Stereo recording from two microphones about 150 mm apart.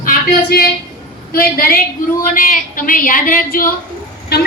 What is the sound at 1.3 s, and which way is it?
Speech, 75° left (ahead or behind).